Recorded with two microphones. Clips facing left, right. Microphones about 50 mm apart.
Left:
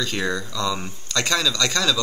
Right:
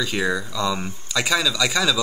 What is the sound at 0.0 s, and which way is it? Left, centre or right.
Speech, centre.